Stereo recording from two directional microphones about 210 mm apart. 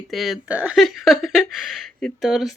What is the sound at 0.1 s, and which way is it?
Speech, centre (ahead or behind).